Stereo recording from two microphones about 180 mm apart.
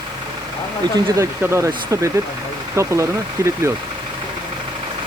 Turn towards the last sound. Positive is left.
turn(degrees=-15)  # may be behind; listen again after turning